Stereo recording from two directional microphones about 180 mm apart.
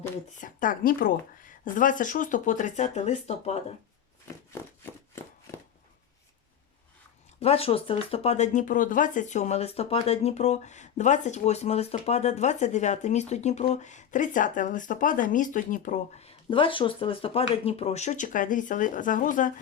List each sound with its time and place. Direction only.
0.4 s speech: 50° left (ahead or behind)
7.3 s speech: 35° left (ahead or behind)